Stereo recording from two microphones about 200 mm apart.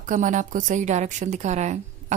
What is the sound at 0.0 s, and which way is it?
Speech, 40° right (ahead or behind).